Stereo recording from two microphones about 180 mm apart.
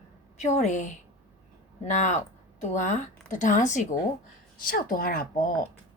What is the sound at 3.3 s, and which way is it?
A woman's voice, 45° left (ahead or behind).